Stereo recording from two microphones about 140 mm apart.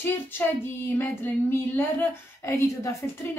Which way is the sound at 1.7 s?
15° left (ahead or behind).